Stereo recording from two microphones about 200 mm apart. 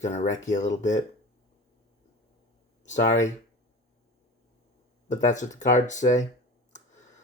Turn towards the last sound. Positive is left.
turn(degrees=35)  # may be behind; listen again after turning